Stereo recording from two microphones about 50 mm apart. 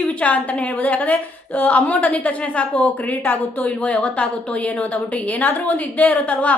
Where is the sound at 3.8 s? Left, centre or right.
Left.